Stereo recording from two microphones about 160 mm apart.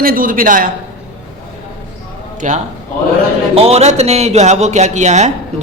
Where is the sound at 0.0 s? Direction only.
60° right (ahead or behind).